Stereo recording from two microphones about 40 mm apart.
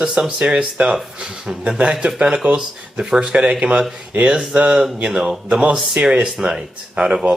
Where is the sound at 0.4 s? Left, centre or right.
Right.